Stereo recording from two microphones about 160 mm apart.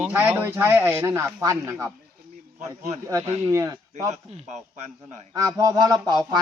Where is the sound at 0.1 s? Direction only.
10° right (ahead or behind).